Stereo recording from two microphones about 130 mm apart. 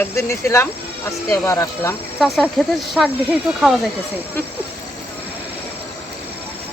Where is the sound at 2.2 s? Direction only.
Centre (ahead or behind).